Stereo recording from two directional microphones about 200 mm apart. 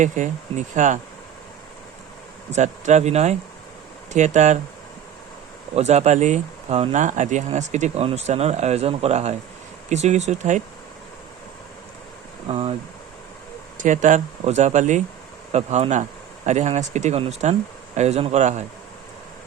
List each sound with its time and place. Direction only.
0.0 s speech: 40° right (ahead or behind)
2.5 s speech: 35° right (ahead or behind)
5.7 s speech: 35° right (ahead or behind)
12.5 s speech: 30° right (ahead or behind)
13.7 s speech: 40° right (ahead or behind)